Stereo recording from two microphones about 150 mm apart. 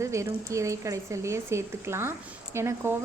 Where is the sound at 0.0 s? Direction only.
20° right (ahead or behind).